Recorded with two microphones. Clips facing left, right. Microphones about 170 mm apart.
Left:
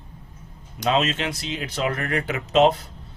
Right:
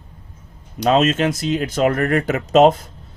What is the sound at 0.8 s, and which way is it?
Speech, 45° right (ahead or behind).